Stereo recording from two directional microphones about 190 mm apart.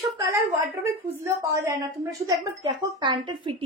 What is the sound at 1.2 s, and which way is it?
Speech, 15° right (ahead or behind).